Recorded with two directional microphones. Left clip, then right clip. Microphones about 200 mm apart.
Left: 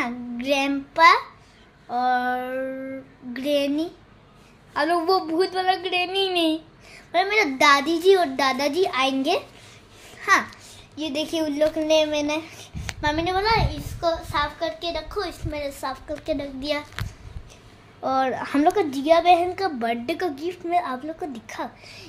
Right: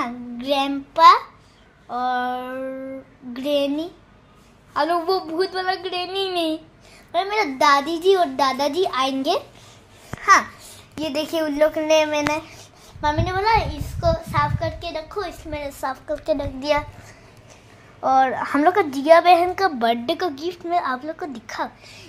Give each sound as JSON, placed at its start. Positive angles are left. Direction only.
{"t": 0.0, "sound": "child singing", "side_deg": 10}
{"t": 1.9, "sound": "a child's voice", "side_deg": 10}
{"t": 11.0, "sound": "a woman's voice", "side_deg": 0}
{"t": 13.2, "sound": "a woman's voice", "side_deg": -5}
{"t": 18.0, "sound": "a child's voice", "side_deg": 15}